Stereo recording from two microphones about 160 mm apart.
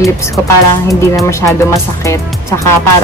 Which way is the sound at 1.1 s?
20° left (ahead or behind).